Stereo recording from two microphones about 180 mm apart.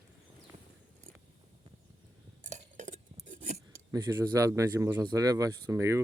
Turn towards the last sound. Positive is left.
turn(degrees=-15)  # may be behind; listen again after turning